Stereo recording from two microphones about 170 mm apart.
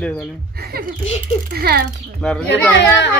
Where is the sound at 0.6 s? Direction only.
65° right (ahead or behind).